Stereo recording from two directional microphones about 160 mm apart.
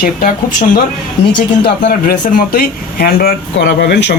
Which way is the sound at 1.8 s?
65° left (ahead or behind).